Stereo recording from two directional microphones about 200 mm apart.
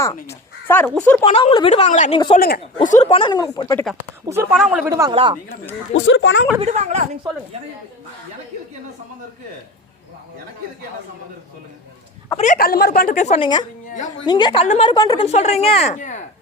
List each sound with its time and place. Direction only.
0.3 s speech: 10° left (ahead or behind)
1.2 s speech: 30° left (ahead or behind)
2.3 s speech: 50° left (ahead or behind)
2.7 s speech: 35° left (ahead or behind); by 3.8 s 15° left (ahead or behind)
4.3 s speech: 10° right (ahead or behind)
4.9 s speech: 15° right (ahead or behind)
5.9 s speech: 70° left (ahead or behind)
6.6 s speech: 35° right (ahead or behind)
12.4 s speech: 45° left (ahead or behind); by 15.3 s 20° left (ahead or behind)
15.3 s speech: 30° left (ahead or behind)